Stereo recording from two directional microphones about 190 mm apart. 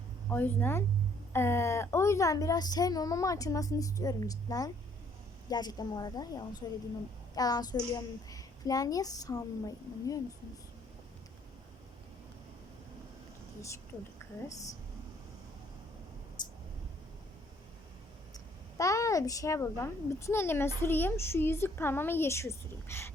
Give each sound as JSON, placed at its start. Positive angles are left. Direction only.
{"t": 0.3, "sound": "a woman's voice", "side_deg": 10}
{"t": 16.4, "sound": "a sound", "side_deg": 20}
{"t": 18.8, "sound": "speech", "side_deg": 15}